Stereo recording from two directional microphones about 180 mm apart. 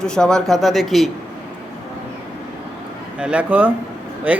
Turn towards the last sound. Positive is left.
turn(degrees=-10)  # may be behind; listen again after turning